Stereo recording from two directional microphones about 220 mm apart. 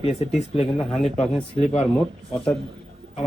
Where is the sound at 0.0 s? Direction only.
30° left (ahead or behind).